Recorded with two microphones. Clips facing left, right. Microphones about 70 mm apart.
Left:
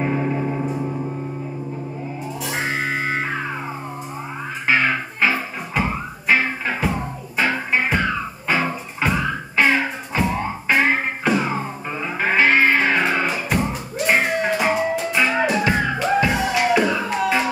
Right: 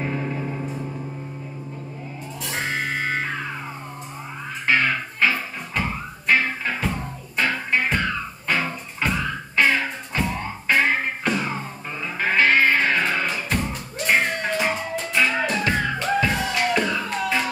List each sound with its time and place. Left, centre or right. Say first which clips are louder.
0.0 s music: left 5 dB; centre
2.4 s music: left 2 dB; centre
4.6 s music: left 2 dB; centre